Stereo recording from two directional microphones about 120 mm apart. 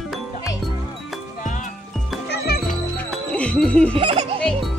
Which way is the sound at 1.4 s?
90° left.